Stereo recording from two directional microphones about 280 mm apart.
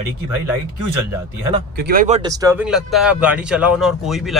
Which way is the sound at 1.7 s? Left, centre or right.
Right.